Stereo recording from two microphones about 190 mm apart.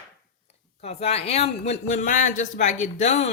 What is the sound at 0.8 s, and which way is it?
Speech, 35° left (ahead or behind).